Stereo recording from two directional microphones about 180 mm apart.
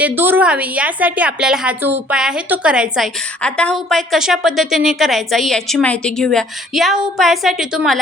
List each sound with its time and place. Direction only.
0.0 s a woman's voice: 10° right (ahead or behind)